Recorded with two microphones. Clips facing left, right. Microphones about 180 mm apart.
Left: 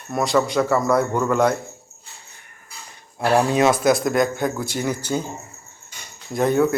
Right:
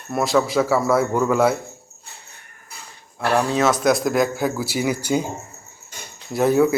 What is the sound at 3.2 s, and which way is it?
Speech, 15° left (ahead or behind).